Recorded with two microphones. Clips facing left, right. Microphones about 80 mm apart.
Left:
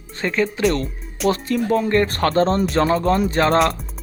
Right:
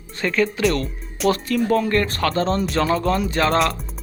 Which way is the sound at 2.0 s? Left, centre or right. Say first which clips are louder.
Left 3 dB; left.